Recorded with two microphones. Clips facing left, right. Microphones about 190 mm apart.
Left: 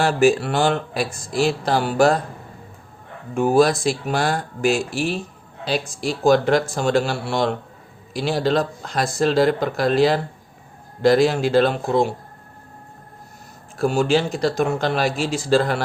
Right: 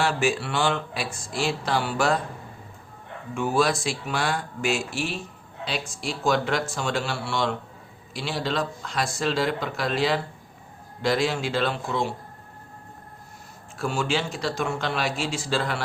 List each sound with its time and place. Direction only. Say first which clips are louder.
0.0 s speech: left 7 dB; 40° left (ahead or behind)
3.3 s speech: left 7 dB; 40° left (ahead or behind)
13.7 s speech: left 8 dB; 40° left (ahead or behind)